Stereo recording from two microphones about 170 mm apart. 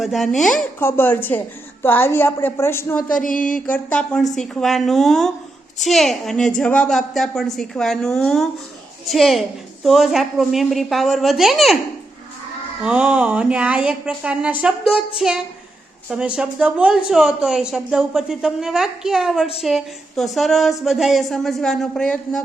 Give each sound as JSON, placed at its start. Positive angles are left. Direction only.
{"t": 0.0, "sound": "a woman's voice", "side_deg": 0}
{"t": 0.6, "sound": "a woman's voice", "side_deg": 15}
{"t": 3.2, "sound": "a sound", "side_deg": 50}
{"t": 3.7, "sound": "a woman's voice", "side_deg": 10}
{"t": 12.8, "sound": "a woman's voice", "side_deg": -5}